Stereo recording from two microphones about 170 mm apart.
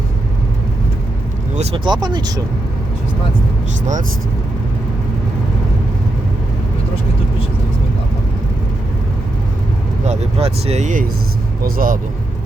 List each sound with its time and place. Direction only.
1.5 s speech: 35° right (ahead or behind)
10.1 s speech: 35° right (ahead or behind)
11.6 s speech: 55° right (ahead or behind)